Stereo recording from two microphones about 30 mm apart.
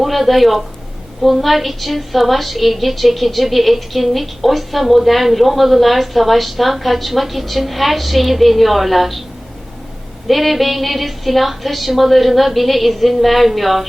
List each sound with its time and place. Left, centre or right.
0.0 s a woman's voice: centre
10.2 s a woman's voice: centre